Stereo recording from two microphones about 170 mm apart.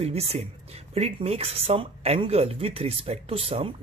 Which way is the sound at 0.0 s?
35° right (ahead or behind).